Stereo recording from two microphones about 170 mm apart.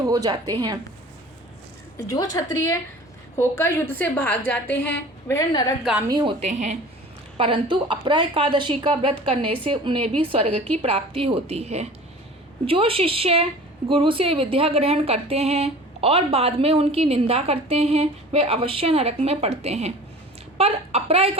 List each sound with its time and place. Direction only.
0.1 s a woman's voice: 20° right (ahead or behind)
2.0 s a woman's voice: 20° left (ahead or behind)
5.5 s a woman's voice: 25° left (ahead or behind)
6.1 s a woman's voice: 25° right (ahead or behind)
6.4 s a woman's voice: 45° right (ahead or behind)
7.3 s a woman's voice: 30° right (ahead or behind)